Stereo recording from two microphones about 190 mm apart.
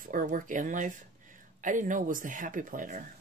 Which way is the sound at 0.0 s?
45° right (ahead or behind).